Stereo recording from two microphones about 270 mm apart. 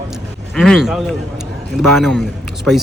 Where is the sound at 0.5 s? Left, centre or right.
Centre.